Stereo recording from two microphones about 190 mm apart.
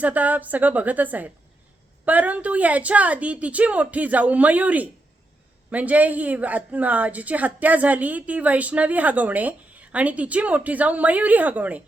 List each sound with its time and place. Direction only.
0.0 s a woman's voice: 10° right (ahead or behind)